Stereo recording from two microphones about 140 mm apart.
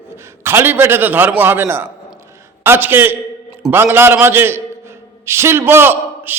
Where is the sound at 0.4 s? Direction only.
15° right (ahead or behind).